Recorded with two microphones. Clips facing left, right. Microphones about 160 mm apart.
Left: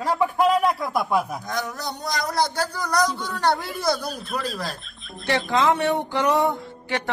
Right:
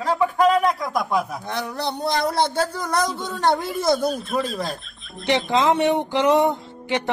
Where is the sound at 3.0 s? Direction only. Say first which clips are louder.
Right 1 dB; centre (ahead or behind).